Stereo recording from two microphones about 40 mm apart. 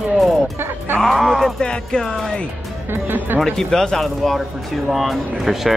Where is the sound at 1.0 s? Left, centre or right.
Centre.